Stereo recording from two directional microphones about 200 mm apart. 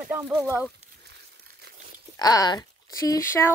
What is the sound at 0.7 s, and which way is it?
Crumpling, 55° right (ahead or behind).